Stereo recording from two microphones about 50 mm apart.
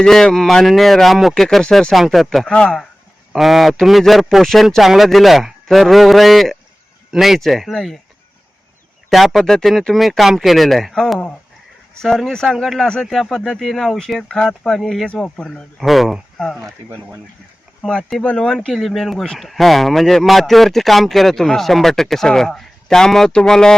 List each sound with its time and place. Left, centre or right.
0.0 s a man's voice: centre
2.5 s a man's voice: centre
3.3 s a man's voice: centre
9.0 s speech: centre
9.4 s a man's voice: centre
11.9 s speech: centre
12.6 s a man's voice: centre
15.2 s a man's voice: centre
18.3 s a man's voice: centre